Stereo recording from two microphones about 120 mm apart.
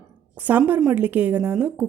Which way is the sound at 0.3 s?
15° right (ahead or behind).